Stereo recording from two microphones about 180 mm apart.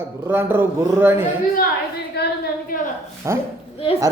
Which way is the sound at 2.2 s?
65° left (ahead or behind).